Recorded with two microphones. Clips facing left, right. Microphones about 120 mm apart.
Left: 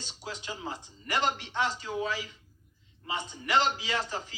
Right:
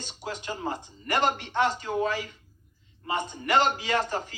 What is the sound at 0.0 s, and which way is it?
A man's voice, 50° right (ahead or behind).